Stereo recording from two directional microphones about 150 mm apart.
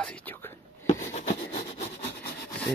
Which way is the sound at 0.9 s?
50° left (ahead or behind).